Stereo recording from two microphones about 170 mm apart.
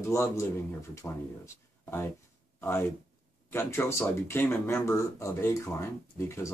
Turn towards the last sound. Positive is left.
turn(degrees=15)  # may be behind; listen again after turning